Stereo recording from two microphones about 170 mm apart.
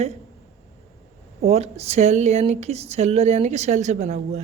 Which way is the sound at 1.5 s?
40° right (ahead or behind).